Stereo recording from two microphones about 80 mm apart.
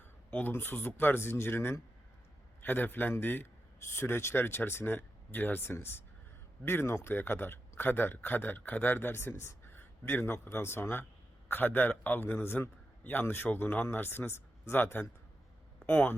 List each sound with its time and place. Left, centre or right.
0.3 s a man's voice: left